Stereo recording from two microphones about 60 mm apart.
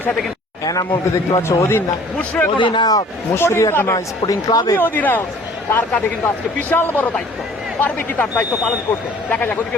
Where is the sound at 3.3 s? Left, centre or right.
Left.